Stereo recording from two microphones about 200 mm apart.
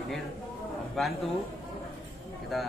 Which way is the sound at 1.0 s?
Centre (ahead or behind).